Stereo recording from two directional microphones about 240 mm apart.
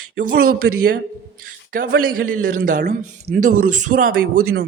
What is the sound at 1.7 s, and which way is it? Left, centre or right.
Speech, right.